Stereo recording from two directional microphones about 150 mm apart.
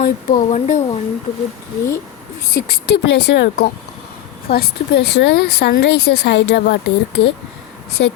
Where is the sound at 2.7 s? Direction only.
90° left.